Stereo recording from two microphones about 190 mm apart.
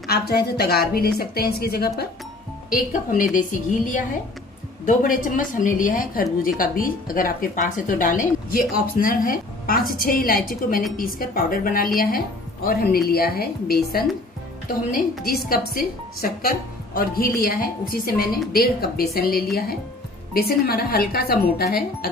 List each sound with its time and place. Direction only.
0.0 s a woman's voice: 55° left (ahead or behind)
2.9 s a woman's voice: 45° left (ahead or behind)
15.2 s a woman's voice: 50° left (ahead or behind)